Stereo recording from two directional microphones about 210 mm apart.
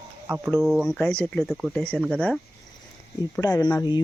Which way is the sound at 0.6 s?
Centre (ahead or behind).